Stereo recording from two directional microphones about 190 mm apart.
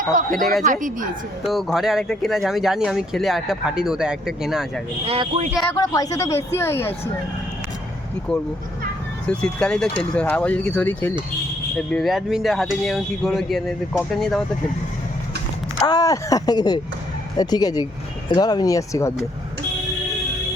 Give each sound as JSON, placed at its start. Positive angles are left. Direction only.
{"t": 0.1, "sound": "a woman's voice", "side_deg": -45}
{"t": 1.5, "sound": "speech", "side_deg": 0}
{"t": 5.0, "sound": "speech", "side_deg": -30}
{"t": 5.7, "sound": "speech", "side_deg": 20}
{"t": 8.3, "sound": "speech", "side_deg": 5}
{"t": 15.9, "sound": "speech", "side_deg": 20}